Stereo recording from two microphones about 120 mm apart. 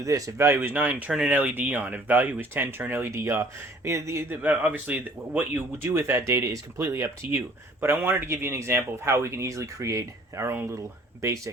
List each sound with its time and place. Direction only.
0.0 s speech: 25° right (ahead or behind)